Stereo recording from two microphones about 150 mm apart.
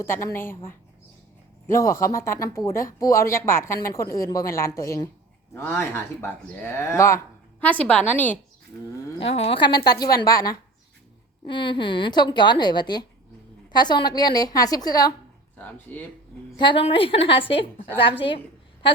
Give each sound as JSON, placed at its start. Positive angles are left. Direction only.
{"t": 0.0, "sound": "speech", "side_deg": 20}
{"t": 9.1, "sound": "a woman's voice", "side_deg": 40}
{"t": 15.5, "sound": "speech", "side_deg": 10}
{"t": 16.6, "sound": "a woman's voice", "side_deg": 35}